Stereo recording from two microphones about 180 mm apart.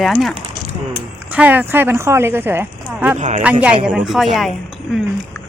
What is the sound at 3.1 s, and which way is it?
Speech, 40° right (ahead or behind).